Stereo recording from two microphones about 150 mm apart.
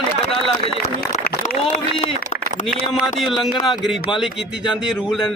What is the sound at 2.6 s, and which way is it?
A man's voice, centre (ahead or behind).